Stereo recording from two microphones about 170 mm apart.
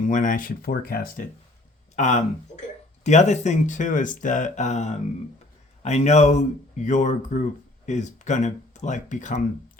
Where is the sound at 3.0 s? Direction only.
45° left (ahead or behind).